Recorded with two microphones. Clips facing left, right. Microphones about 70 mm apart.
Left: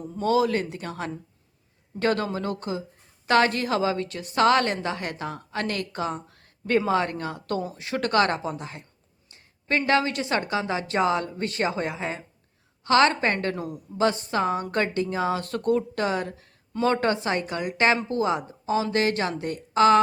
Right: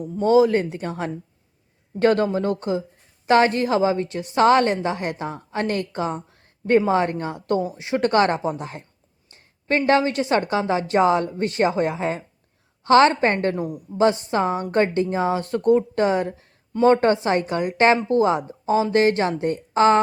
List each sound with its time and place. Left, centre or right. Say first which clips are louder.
0.2 s a woman's voice: right 6 dB; right
13.6 s a woman's voice: right 5 dB; centre